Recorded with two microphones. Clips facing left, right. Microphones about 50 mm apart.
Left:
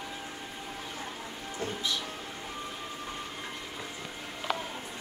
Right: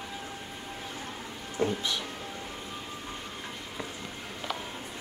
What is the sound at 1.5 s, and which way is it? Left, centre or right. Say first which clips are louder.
Speech: right 5 dB; centre.